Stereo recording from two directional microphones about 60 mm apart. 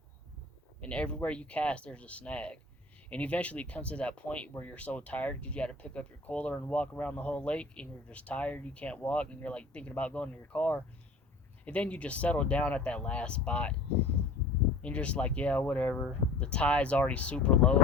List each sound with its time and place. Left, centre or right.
0.8 s speech: centre
14.8 s speech: left